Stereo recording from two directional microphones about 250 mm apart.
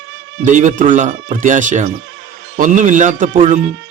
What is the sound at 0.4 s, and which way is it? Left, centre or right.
A man's voice, right.